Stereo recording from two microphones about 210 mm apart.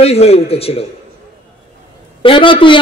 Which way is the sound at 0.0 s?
30° left (ahead or behind).